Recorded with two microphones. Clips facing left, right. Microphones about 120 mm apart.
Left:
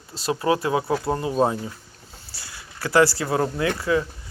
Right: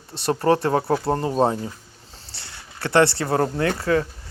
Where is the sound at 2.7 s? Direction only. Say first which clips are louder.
Even; 30° right (ahead or behind); by 4.0 s 45° right (ahead or behind).